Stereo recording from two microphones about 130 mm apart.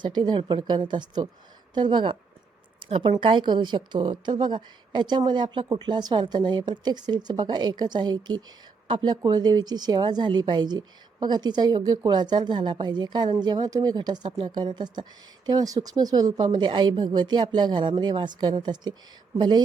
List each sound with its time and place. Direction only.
0.0 s a woman's voice: 35° right (ahead or behind)